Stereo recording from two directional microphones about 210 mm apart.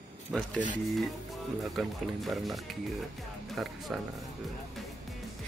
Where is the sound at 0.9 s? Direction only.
Centre (ahead or behind).